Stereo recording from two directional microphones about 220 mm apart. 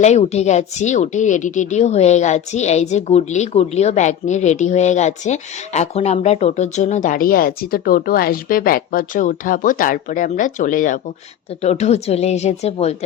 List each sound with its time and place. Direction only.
0.0 s a woman's voice: 30° left (ahead or behind)